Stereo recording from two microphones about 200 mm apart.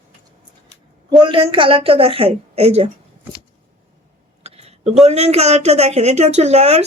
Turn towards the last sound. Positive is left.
turn(degrees=-35)  # may be behind; listen again after turning